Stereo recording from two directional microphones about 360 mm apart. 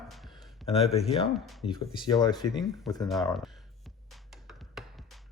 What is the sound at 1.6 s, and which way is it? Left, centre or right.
Speech, centre.